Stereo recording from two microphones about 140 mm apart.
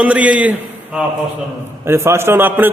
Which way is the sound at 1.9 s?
20° right (ahead or behind).